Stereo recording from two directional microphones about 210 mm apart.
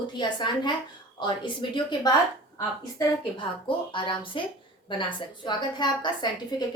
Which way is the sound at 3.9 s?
25° left (ahead or behind).